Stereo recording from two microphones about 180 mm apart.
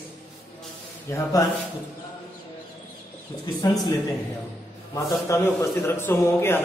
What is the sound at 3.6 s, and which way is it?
Speech, 20° left (ahead or behind).